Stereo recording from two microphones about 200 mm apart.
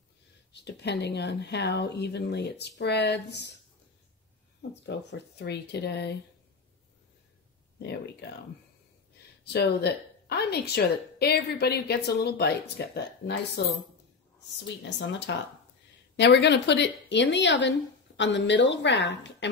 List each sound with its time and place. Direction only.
0.5 s speech: 55° left (ahead or behind)
4.6 s speech: 55° left (ahead or behind)
7.8 s speech: 55° left (ahead or behind)
9.4 s speech: 55° left (ahead or behind)
14.9 s speech: 60° left (ahead or behind)